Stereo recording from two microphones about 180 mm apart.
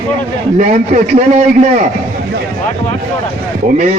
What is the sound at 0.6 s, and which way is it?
Speech, 45° right (ahead or behind).